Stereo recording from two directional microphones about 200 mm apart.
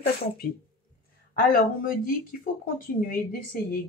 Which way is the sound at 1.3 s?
45° left (ahead or behind).